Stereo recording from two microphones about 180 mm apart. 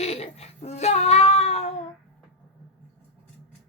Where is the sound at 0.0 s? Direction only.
35° left (ahead or behind).